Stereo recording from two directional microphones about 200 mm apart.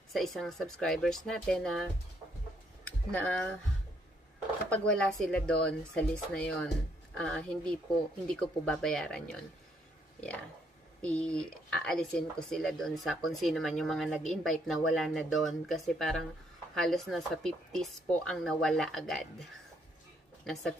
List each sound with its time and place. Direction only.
0.1 s speech: centre (ahead or behind)
2.8 s a sound: 5° left (ahead or behind)
4.6 s speech: 5° left (ahead or behind)
11.1 s speech: 5° left (ahead or behind)